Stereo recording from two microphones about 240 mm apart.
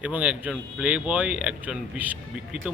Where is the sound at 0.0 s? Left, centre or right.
Centre.